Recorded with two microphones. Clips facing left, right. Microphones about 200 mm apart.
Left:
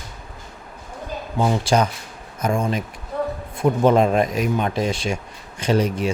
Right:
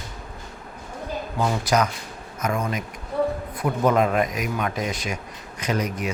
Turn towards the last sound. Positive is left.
turn(degrees=30)  # may be behind; listen again after turning